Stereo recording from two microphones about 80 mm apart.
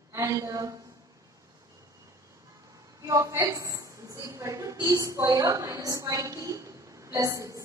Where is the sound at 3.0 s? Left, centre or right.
Right.